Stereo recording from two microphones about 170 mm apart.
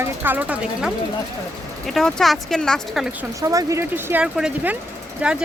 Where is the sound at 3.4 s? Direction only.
20° right (ahead or behind).